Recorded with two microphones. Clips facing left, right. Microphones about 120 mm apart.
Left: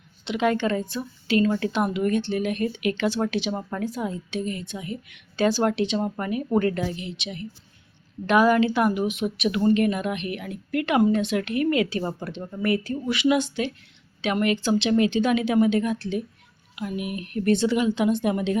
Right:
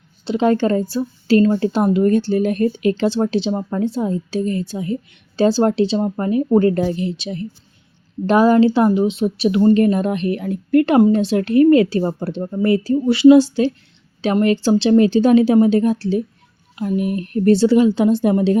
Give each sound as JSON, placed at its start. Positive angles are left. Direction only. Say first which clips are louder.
{"t": 0.3, "sound": "speech", "louder": "right 7 dB", "side_deg": -35}